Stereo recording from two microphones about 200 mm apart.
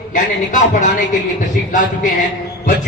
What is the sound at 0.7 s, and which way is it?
Speech, 40° left (ahead or behind).